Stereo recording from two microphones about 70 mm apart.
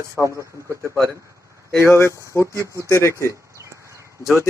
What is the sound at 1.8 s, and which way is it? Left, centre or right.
Speech, left.